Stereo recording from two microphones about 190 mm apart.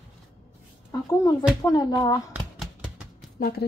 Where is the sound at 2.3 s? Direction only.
5° right (ahead or behind).